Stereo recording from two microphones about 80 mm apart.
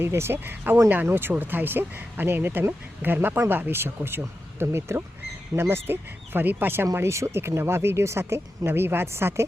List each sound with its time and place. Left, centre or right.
0.0 s speech: right